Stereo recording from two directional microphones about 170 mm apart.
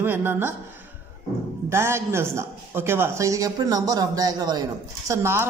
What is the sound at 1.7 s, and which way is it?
A man's voice, 15° right (ahead or behind).